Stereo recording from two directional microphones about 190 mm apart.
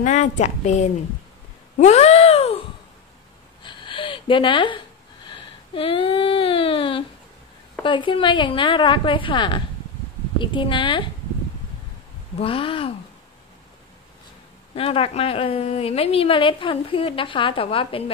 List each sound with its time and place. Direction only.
0.0 s a woman's voice: 40° left (ahead or behind)
1.8 s a sound: 35° left (ahead or behind)
3.6 s a sound: 25° left (ahead or behind)
7.8 s a woman's voice: 25° left (ahead or behind)
12.4 s a woman's voice: 30° left (ahead or behind)
14.8 s a woman's voice: 30° left (ahead or behind)